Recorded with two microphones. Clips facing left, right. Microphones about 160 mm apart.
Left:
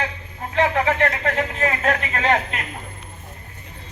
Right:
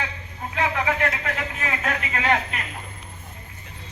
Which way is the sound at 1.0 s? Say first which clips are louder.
Left 5 dB; 45° left (ahead or behind).